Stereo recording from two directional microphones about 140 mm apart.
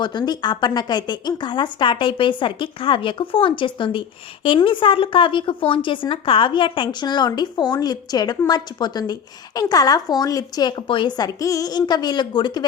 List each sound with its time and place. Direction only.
0.0 s speech: 30° left (ahead or behind)